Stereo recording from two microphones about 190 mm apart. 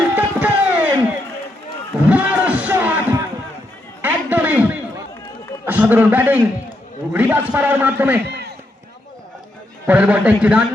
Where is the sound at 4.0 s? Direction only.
10° right (ahead or behind).